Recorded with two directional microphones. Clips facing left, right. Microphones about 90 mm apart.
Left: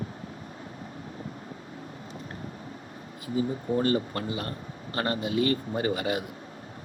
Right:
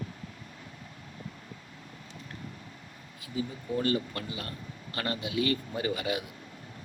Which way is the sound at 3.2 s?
35° left (ahead or behind).